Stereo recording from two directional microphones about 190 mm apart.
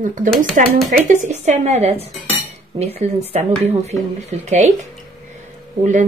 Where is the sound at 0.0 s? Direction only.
45° right (ahead or behind).